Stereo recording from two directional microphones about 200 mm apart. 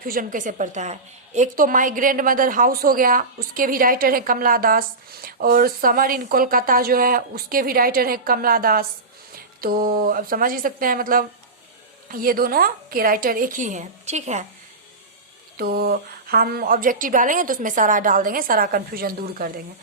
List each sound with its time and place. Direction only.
0.0 s a woman's voice: 45° right (ahead or behind)
15.5 s a woman's voice: 50° right (ahead or behind)